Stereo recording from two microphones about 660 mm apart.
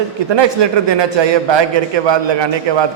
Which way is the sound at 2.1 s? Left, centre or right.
Right.